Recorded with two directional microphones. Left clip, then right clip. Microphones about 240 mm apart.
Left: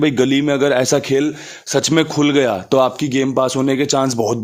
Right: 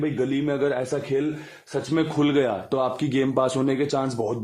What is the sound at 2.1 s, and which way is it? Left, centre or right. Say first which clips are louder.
Speech: left 7 dB; left.